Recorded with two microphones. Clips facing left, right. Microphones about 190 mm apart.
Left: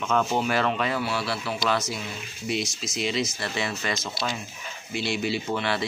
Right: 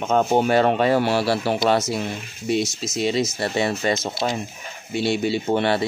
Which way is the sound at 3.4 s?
35° right (ahead or behind).